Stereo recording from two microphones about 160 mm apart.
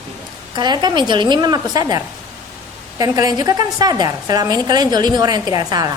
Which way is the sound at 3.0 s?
20° right (ahead or behind).